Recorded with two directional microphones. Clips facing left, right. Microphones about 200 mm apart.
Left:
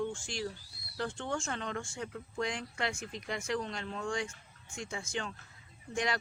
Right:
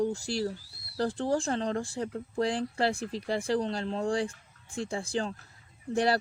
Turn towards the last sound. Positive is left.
turn(degrees=-35)  # may be behind; listen again after turning